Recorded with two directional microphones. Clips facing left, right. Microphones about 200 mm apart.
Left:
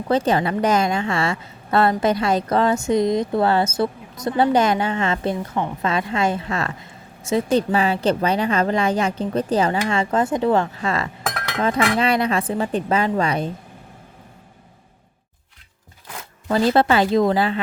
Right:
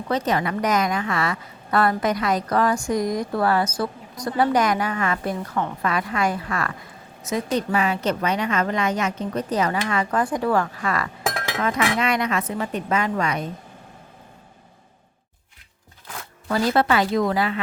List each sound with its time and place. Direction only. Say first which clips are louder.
0.1 s a woman's voice: left 4 dB; 30° left (ahead or behind)
16.5 s a woman's voice: left 3 dB; 25° left (ahead or behind)